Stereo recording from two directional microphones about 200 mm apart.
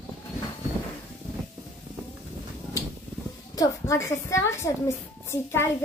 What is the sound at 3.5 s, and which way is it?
A woman's voice, 15° left (ahead or behind).